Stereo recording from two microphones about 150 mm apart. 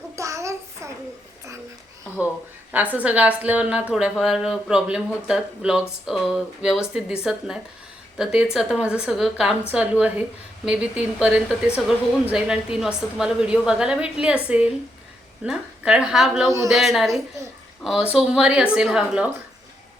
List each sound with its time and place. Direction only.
0.2 s child singing: 20° right (ahead or behind)
2.7 s a woman's voice: 10° right (ahead or behind)